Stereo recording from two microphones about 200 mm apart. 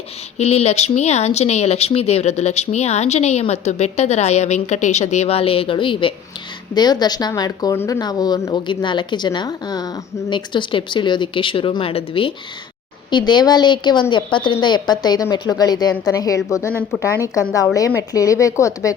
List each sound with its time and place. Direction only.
0.3 s speech: 30° left (ahead or behind); by 18.9 s 15° left (ahead or behind)